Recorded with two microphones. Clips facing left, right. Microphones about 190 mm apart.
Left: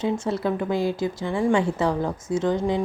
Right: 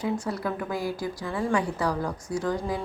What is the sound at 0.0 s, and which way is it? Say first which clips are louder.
Speech: left 4 dB; 25° left (ahead or behind).